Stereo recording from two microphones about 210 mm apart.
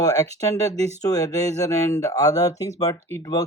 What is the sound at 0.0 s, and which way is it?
Speech, 15° left (ahead or behind).